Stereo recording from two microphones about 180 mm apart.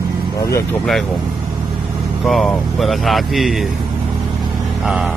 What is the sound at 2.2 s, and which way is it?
Speech, centre (ahead or behind).